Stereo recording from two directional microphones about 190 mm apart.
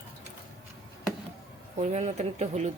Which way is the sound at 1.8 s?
35° right (ahead or behind).